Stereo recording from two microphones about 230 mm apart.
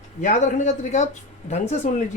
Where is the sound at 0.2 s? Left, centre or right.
Left.